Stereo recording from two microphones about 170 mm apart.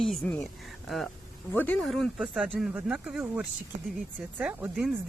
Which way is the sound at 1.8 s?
Centre (ahead or behind).